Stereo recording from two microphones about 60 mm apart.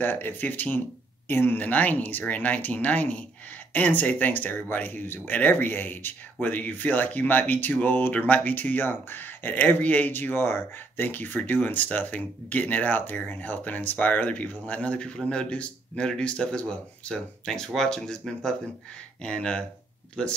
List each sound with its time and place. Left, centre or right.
0.0 s speech: left
1.6 s speech: left